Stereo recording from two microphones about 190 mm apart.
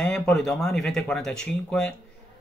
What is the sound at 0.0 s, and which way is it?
Speech, 5° left (ahead or behind).